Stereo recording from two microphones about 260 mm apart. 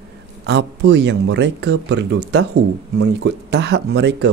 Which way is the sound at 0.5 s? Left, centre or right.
Right.